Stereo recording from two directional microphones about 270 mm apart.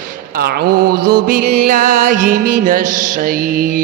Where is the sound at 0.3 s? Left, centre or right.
Right.